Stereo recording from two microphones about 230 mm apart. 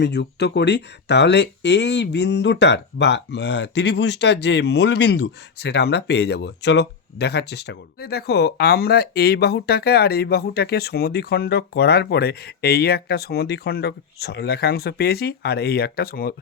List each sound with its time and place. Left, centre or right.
0.0 s speech: left